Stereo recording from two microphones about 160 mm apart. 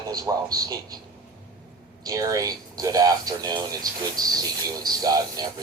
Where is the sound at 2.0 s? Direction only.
20° right (ahead or behind).